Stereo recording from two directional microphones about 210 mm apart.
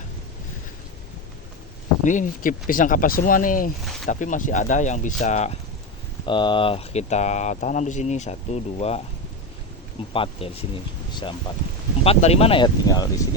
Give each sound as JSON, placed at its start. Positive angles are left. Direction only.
{"t": 2.0, "sound": "speech", "side_deg": 40}
{"t": 10.1, "sound": "speech", "side_deg": 25}